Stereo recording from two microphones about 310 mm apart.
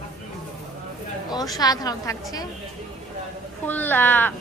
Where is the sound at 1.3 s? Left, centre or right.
Centre.